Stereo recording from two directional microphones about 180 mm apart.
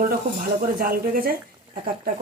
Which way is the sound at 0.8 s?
55° right (ahead or behind).